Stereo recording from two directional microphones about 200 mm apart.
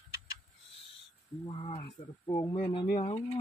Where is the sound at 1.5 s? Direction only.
25° left (ahead or behind).